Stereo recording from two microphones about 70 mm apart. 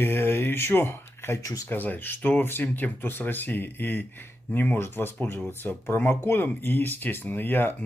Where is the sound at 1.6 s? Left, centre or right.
Left.